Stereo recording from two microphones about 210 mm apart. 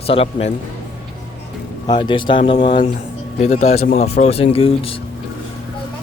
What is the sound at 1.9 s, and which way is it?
Speech, 25° left (ahead or behind).